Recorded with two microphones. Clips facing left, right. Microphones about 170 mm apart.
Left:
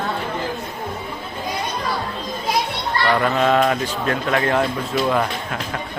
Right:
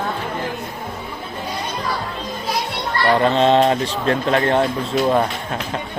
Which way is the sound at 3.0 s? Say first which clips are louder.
Right 3 dB; 30° right (ahead or behind).